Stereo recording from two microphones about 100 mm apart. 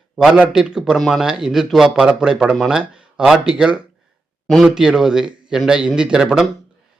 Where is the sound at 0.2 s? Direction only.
5° right (ahead or behind).